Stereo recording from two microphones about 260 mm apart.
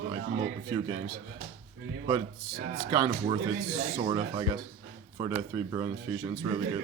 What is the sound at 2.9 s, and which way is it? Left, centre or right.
Speech, centre.